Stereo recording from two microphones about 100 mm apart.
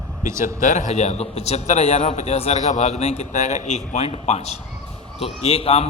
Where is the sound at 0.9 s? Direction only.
90° left.